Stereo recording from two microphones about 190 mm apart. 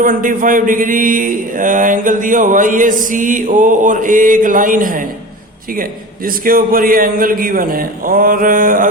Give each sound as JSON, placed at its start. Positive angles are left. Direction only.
{"t": 0.0, "sound": "a man's voice", "side_deg": -45}